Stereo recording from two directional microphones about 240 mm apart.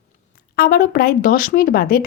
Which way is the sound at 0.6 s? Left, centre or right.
Left.